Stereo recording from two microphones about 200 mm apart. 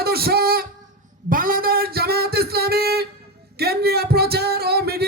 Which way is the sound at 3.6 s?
50° right (ahead or behind).